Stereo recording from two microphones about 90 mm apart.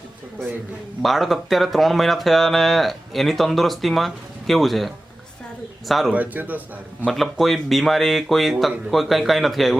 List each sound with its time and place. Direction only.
1.0 s speech: centre (ahead or behind)
6.1 s speech: 20° right (ahead or behind)
7.1 s speech: centre (ahead or behind)